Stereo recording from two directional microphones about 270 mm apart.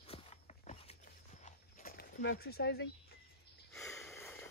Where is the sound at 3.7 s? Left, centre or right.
Centre.